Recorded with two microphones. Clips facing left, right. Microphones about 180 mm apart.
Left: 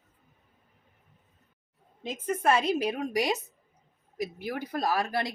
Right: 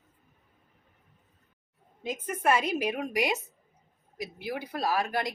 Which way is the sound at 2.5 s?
30° left (ahead or behind).